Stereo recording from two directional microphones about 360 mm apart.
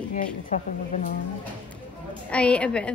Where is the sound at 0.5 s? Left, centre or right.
Centre.